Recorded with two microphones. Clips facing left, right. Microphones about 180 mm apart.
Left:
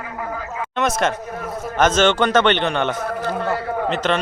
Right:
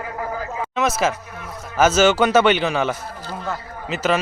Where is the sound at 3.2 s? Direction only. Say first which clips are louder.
Left 5 dB; 65° left (ahead or behind).